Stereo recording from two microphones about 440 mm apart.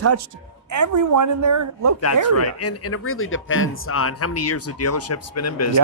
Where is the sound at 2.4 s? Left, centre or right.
Left.